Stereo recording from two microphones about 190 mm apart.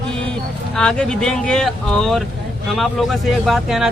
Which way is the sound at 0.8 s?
5° left (ahead or behind).